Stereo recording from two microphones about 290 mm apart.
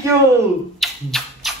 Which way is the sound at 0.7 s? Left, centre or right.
Centre.